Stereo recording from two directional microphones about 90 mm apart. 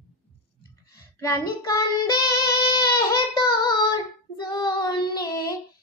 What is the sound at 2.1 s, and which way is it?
Child singing, 50° left (ahead or behind).